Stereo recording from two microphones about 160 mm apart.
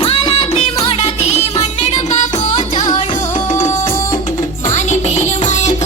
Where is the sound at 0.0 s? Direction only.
35° left (ahead or behind); by 3.7 s 50° left (ahead or behind).